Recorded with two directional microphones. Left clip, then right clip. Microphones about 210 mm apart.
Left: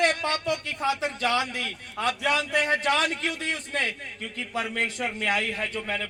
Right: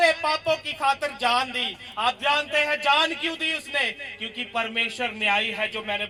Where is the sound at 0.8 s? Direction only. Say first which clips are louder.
Right 4 dB; 35° left (ahead or behind).